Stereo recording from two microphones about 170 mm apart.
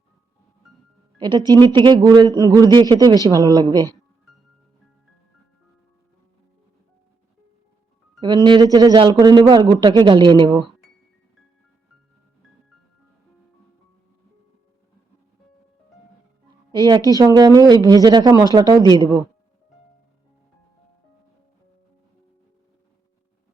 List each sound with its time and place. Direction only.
1.2 s speech: 25° right (ahead or behind)
8.2 s speech: 25° right (ahead or behind)
16.7 s speech: 25° right (ahead or behind)